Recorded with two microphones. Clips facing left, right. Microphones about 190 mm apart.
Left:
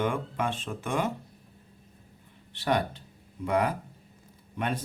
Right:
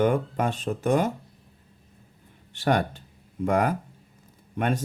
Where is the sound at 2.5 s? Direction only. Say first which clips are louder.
Right 4 dB; 45° right (ahead or behind).